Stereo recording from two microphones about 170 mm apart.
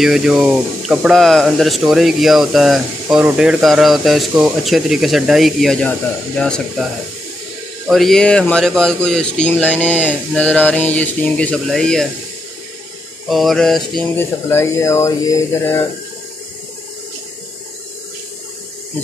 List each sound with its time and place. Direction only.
0.0 s speech: centre (ahead or behind)
7.9 s speech: centre (ahead or behind)
13.3 s speech: centre (ahead or behind)
14.1 s speech: 15° left (ahead or behind)